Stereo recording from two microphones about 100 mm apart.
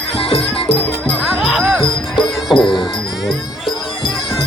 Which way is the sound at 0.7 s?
10° left (ahead or behind).